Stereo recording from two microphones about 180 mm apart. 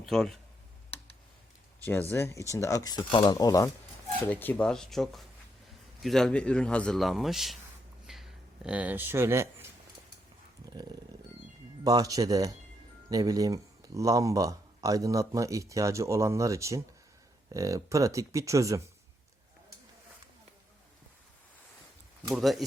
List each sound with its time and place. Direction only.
0.0 s speech: centre (ahead or behind)
1.8 s speech: 10° left (ahead or behind)
4.3 s speech: 10° left (ahead or behind)
8.0 s a sound: centre (ahead or behind)
11.8 s speech: 20° right (ahead or behind)
22.3 s speech: centre (ahead or behind)